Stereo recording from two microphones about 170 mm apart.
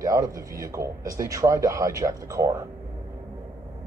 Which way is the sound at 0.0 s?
20° right (ahead or behind).